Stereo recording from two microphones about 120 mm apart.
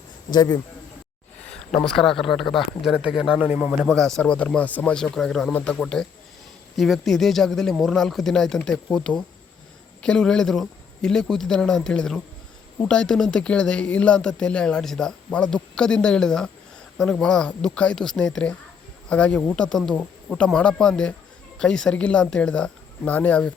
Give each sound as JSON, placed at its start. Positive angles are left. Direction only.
{"t": 0.3, "sound": "speech", "side_deg": 35}
{"t": 2.4, "sound": "speech", "side_deg": 45}
{"t": 2.8, "sound": "speech", "side_deg": -5}
{"t": 3.8, "sound": "speech", "side_deg": 5}